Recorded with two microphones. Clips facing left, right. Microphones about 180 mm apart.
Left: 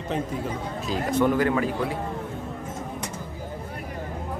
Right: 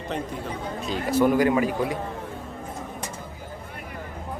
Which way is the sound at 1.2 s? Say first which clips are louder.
Right 3 dB; 10° right (ahead or behind).